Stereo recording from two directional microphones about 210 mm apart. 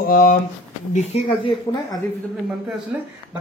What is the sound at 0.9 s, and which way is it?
Speech, 30° left (ahead or behind).